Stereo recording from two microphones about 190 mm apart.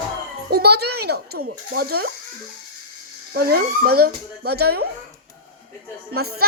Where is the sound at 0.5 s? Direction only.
55° right (ahead or behind).